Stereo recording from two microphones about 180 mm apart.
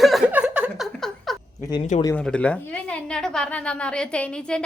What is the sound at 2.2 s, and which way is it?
A woman's voice, 5° left (ahead or behind).